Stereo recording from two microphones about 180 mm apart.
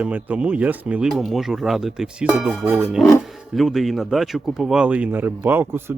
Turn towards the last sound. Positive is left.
turn(degrees=-10)  # may be behind; listen again after turning